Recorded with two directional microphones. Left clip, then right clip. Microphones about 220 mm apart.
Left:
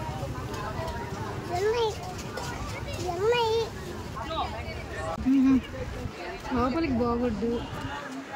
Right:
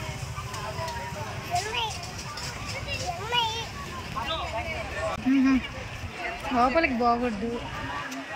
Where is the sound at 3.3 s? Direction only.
15° left (ahead or behind).